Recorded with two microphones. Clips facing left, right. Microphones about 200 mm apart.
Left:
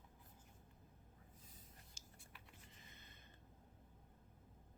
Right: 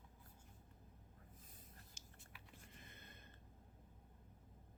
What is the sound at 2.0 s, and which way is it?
Typing, 60° right (ahead or behind).